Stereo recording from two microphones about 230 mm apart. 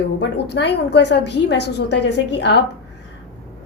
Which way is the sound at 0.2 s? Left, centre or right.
Left.